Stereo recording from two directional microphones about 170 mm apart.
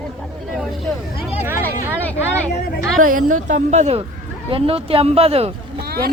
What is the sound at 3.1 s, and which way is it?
Speech, 50° right (ahead or behind).